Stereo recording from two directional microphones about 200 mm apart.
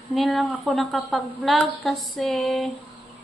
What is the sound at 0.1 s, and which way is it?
A woman's voice, centre (ahead or behind).